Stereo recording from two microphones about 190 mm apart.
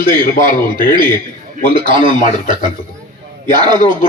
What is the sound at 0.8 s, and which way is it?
Speech, 40° left (ahead or behind).